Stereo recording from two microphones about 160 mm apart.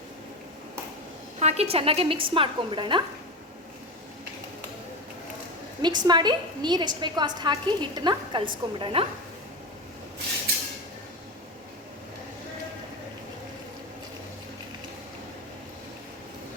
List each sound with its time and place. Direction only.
1.4 s a woman's voice: 45° right (ahead or behind)
5.8 s a woman's voice: 25° right (ahead or behind)